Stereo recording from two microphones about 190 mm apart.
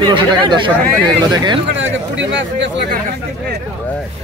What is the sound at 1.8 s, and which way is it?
Speech, 70° right (ahead or behind).